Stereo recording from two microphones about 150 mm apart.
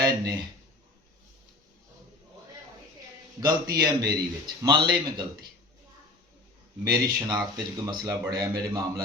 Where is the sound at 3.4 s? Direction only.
25° right (ahead or behind).